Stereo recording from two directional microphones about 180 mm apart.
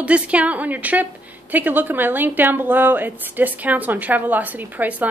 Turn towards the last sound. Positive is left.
turn(degrees=-10)  # may be behind; listen again after turning